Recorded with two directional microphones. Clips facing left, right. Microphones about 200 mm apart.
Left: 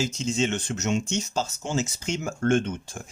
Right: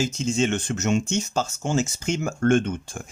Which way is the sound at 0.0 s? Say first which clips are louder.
Right 3 dB; 50° right (ahead or behind).